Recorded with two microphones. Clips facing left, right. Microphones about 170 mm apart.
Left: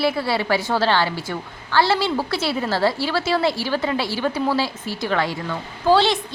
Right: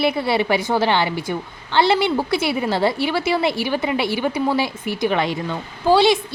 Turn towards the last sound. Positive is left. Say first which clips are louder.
# right 2 dB
turn(degrees=-15)  # may be behind; listen again after turning